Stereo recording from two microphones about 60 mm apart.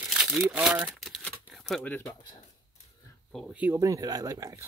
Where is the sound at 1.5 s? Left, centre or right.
Centre.